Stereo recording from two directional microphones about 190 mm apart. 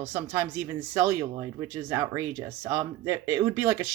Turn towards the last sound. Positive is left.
turn(degrees=-20)  # may be behind; listen again after turning